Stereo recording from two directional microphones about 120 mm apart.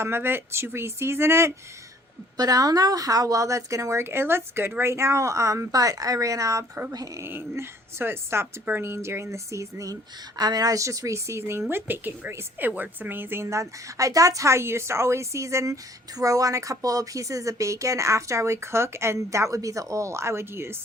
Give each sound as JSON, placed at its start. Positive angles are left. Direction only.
{"t": 0.0, "sound": "a woman's voice", "side_deg": -20}
{"t": 2.4, "sound": "a woman's voice", "side_deg": -30}
{"t": 7.3, "sound": "a woman's voice", "side_deg": -20}